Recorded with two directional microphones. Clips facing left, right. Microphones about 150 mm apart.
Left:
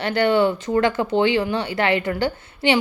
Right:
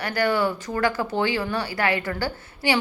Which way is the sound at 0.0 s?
25° left (ahead or behind).